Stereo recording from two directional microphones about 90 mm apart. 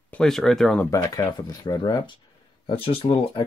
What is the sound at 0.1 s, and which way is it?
Speech, 5° left (ahead or behind).